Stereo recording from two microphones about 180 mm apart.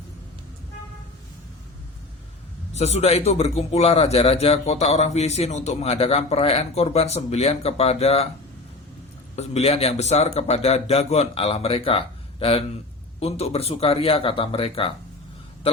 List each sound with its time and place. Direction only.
2.7 s a man's voice: 35° left (ahead or behind)
9.3 s a man's voice: 35° left (ahead or behind)